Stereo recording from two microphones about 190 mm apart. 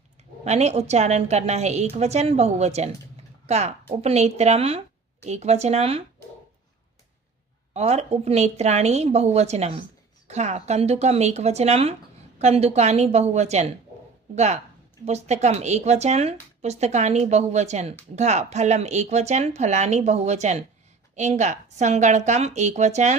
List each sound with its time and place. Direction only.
0.4 s speech: 35° right (ahead or behind)
7.7 s speech: 35° right (ahead or behind)